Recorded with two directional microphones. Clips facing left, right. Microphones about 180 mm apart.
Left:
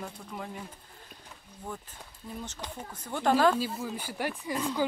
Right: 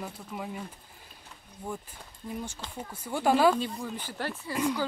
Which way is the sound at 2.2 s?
5° right (ahead or behind).